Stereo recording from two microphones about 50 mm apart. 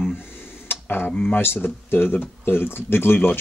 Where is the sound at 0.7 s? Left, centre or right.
Left.